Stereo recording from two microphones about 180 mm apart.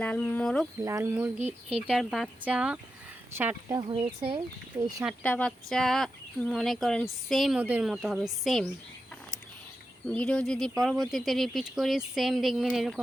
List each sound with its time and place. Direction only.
0.0 s speech: 10° left (ahead or behind)
0.8 s speech: 15° right (ahead or behind)
1.9 s speech: centre (ahead or behind); by 5.0 s 20° right (ahead or behind)
5.2 s speech: 10° left (ahead or behind)
10.1 s speech: 5° left (ahead or behind)